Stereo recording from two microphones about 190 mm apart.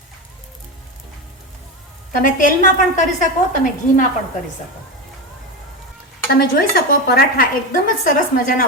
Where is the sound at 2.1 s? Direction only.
45° left (ahead or behind).